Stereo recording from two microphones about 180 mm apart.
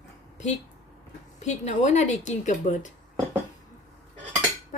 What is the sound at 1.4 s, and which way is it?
Speech, 40° left (ahead or behind).